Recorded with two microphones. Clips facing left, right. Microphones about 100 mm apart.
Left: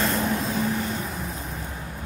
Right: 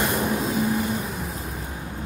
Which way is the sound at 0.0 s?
15° right (ahead or behind).